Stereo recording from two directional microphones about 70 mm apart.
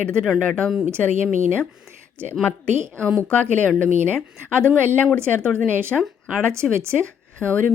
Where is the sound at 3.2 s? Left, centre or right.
Centre.